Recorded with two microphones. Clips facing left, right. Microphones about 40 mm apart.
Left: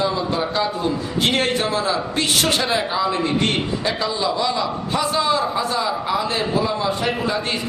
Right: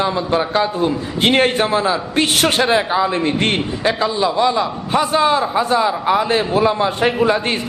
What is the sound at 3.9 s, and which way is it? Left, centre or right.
A man's voice, right.